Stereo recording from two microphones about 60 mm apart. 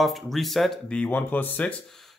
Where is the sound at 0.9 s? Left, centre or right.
Centre.